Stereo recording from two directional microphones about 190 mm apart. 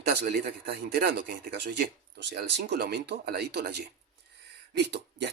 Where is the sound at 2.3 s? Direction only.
60° right (ahead or behind).